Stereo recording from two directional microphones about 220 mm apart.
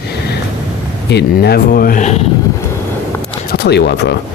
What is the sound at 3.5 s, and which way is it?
Speech, 50° left (ahead or behind).